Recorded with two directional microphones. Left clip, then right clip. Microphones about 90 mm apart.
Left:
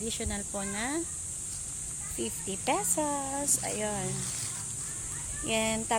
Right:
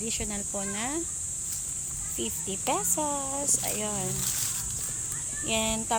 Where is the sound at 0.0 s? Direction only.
30° left (ahead or behind).